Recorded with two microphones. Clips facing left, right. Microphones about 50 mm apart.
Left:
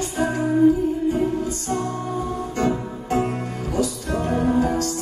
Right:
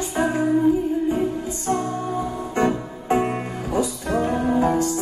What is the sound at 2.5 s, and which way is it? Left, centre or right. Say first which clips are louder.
Music: right 3 dB; right.